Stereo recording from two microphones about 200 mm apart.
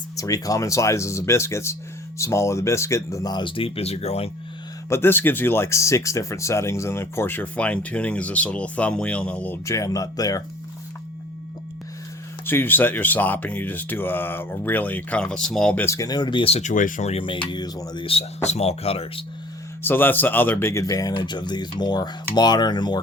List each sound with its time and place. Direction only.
0.2 s speech: 15° left (ahead or behind)
4.9 s speech: 10° left (ahead or behind)
12.5 s speech: 10° left (ahead or behind); by 19.2 s 30° left (ahead or behind)
19.8 s speech: 10° left (ahead or behind)